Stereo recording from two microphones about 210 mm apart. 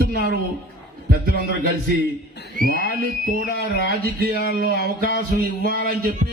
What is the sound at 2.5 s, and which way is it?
Music, 40° right (ahead or behind).